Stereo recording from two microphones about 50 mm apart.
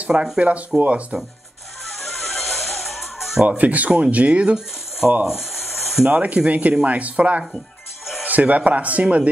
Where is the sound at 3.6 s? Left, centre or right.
Right.